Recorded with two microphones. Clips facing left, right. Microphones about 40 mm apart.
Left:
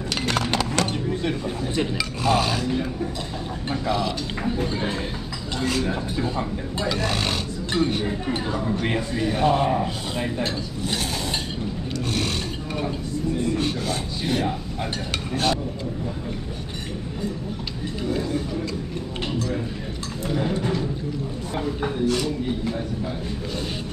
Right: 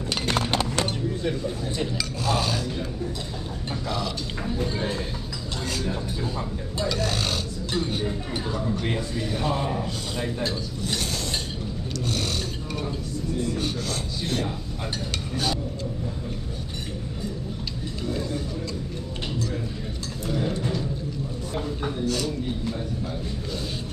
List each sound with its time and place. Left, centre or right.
0.2 s a sound: left
1.2 s a sound: left
2.0 s speech: centre
3.8 s speech: centre
13.7 s speech: centre
15.3 s speech: left
20.2 s music: left
22.0 s a man's voice: left